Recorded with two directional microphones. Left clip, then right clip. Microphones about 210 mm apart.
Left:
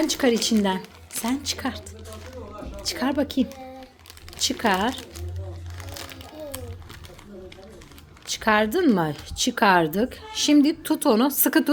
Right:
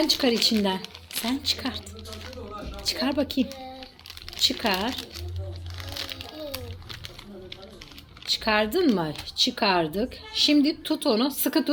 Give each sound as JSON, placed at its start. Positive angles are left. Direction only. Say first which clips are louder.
{"t": 0.0, "sound": "speech", "louder": "even", "side_deg": 20}
{"t": 2.8, "sound": "a woman's voice", "louder": "left 1 dB", "side_deg": 15}
{"t": 5.9, "sound": "crumpling", "louder": "right 4 dB", "side_deg": 15}
{"t": 8.4, "sound": "speech", "louder": "left 4 dB", "side_deg": 20}